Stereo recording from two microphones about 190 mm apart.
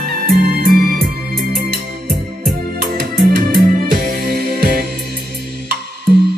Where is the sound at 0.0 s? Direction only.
55° right (ahead or behind).